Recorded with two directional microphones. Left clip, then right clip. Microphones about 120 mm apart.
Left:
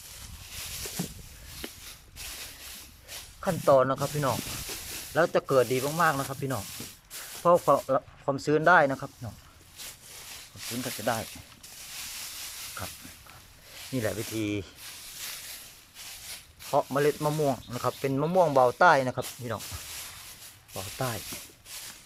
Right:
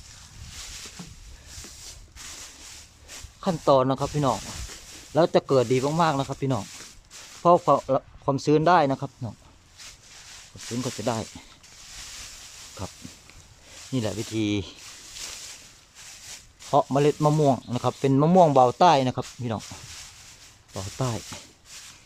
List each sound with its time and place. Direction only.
3.4 s speech: 30° right (ahead or behind)
11.0 s speech: 35° right (ahead or behind)
13.9 s speech: 15° right (ahead or behind)
16.7 s speech: 30° right (ahead or behind)
18.3 s speech: 30° right (ahead or behind)
20.7 s speech: 30° right (ahead or behind)